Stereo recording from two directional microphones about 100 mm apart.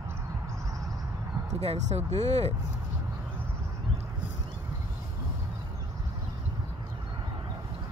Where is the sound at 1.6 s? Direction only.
90° right.